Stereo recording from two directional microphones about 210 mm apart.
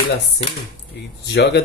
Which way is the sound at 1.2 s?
50° left (ahead or behind).